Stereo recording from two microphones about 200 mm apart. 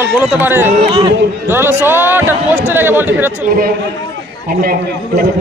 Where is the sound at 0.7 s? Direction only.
25° right (ahead or behind).